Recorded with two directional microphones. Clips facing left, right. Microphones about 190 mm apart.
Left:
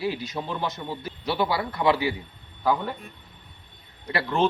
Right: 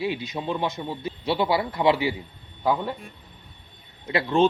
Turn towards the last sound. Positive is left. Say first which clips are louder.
# right 3 dB
turn(degrees=-15)  # may be behind; listen again after turning